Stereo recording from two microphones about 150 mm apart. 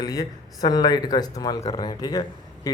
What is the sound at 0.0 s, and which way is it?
A man's voice, 25° left (ahead or behind).